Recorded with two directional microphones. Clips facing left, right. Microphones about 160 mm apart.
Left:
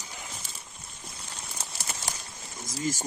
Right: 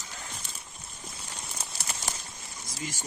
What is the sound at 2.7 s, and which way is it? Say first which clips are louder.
Speech: left 8 dB; 40° left (ahead or behind).